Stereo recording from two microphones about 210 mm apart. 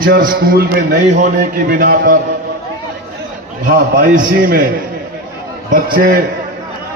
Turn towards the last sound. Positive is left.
turn(degrees=-40)  # may be behind; listen again after turning